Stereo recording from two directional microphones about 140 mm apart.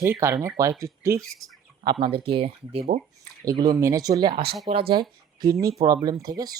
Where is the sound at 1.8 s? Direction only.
35° right (ahead or behind).